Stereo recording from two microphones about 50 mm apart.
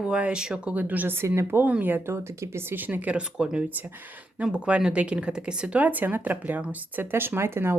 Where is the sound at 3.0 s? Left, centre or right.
Centre.